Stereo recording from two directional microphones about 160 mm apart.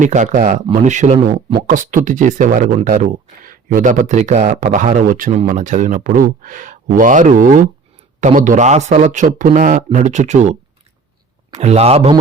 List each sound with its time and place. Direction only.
0.0 s speech: 50° right (ahead or behind)
1.5 s a man's voice: 55° right (ahead or behind); by 12.2 s 35° right (ahead or behind)